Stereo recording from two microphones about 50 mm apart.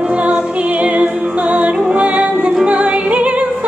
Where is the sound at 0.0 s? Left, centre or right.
Right.